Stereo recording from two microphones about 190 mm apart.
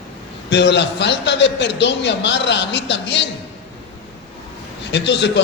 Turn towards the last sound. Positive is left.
turn(degrees=65)  # may be behind; listen again after turning